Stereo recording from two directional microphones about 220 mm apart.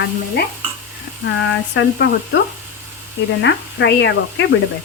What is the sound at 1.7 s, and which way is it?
Speech, 55° left (ahead or behind).